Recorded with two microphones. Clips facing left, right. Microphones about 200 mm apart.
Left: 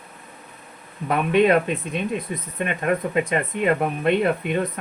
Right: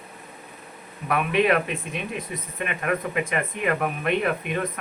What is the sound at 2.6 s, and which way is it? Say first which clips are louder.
Speech: left 4 dB; 30° left (ahead or behind).